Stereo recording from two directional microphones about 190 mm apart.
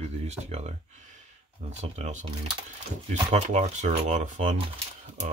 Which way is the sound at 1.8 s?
35° right (ahead or behind).